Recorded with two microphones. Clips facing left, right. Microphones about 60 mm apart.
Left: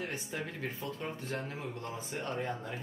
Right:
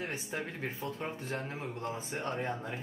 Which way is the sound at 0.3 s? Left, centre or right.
Right.